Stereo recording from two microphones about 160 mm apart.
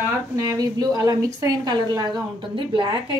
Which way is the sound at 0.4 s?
20° right (ahead or behind).